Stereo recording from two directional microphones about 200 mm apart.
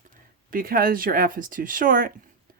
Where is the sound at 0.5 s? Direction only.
45° right (ahead or behind).